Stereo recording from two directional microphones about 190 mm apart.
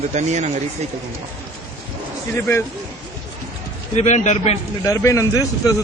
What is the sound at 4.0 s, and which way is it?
Speech, 40° left (ahead or behind).